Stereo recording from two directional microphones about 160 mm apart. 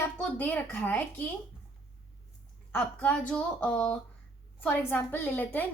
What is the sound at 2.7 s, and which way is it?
A woman's voice, 10° left (ahead or behind).